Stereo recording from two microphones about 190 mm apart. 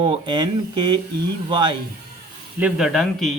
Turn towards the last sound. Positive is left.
turn(degrees=0)  # may be behind; listen again after turning